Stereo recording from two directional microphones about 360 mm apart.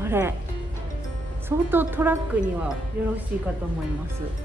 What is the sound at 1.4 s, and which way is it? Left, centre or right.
Speech, centre.